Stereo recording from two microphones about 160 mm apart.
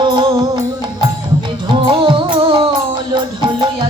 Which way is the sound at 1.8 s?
30° right (ahead or behind).